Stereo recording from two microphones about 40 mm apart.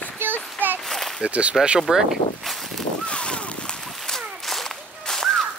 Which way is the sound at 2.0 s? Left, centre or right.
Centre.